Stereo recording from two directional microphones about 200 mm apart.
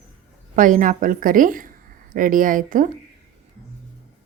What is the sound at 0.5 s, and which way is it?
Speech, 40° right (ahead or behind).